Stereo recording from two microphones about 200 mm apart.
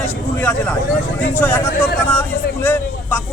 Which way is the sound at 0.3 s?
5° left (ahead or behind).